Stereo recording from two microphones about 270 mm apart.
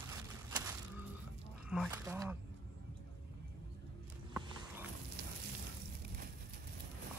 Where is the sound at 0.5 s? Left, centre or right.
Centre.